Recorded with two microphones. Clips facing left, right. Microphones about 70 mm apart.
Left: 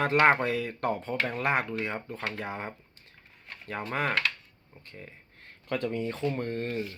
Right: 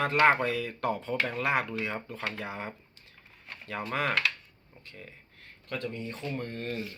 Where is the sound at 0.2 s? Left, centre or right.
Left.